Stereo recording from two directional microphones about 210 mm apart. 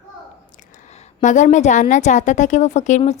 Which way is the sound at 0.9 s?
35° left (ahead or behind).